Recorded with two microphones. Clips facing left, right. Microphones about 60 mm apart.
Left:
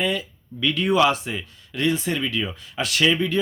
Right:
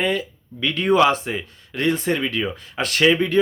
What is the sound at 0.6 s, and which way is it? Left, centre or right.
Speech, right.